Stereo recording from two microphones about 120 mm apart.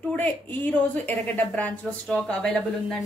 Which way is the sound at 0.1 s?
15° left (ahead or behind).